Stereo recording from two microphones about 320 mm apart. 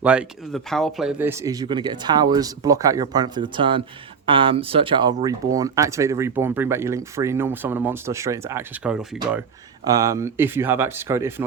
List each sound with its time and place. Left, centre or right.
0.0 s speech: centre